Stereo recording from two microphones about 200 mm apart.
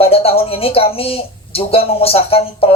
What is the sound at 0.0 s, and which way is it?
A woman's voice, 30° left (ahead or behind).